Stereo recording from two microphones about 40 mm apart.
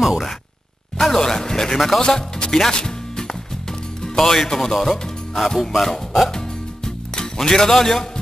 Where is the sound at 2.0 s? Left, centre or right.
Centre.